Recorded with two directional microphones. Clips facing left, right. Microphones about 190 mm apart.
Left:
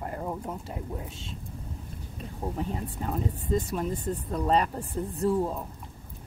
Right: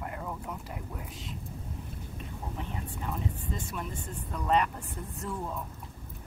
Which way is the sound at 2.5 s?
40° left (ahead or behind).